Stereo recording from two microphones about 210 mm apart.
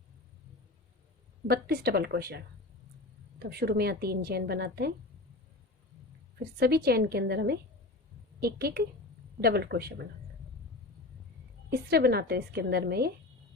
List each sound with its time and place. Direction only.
1.5 s a woman's voice: 50° right (ahead or behind)
6.6 s a woman's voice: 45° right (ahead or behind)
11.7 s a woman's voice: 50° right (ahead or behind)